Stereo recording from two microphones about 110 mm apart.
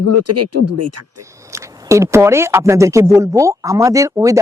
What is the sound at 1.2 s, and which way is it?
Speech, 25° right (ahead or behind).